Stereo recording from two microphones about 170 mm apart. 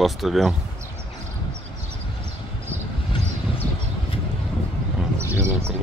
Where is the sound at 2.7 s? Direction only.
15° right (ahead or behind).